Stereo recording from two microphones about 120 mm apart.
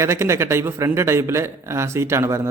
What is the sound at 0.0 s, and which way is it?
Speech, 25° right (ahead or behind).